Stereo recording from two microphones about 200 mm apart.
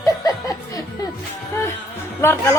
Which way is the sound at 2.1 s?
10° left (ahead or behind).